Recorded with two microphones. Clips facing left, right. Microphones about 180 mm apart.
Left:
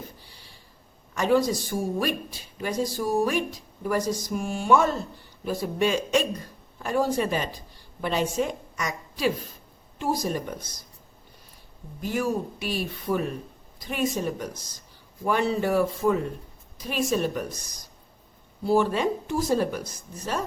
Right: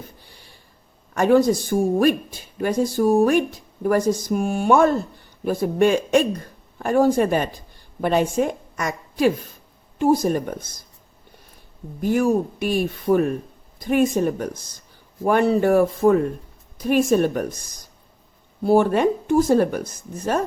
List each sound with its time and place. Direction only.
1.1 s a woman's voice: 55° right (ahead or behind)
11.9 s speech: 50° right (ahead or behind)